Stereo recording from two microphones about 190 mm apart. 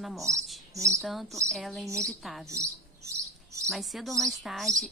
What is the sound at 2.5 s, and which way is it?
Chirp, 15° right (ahead or behind).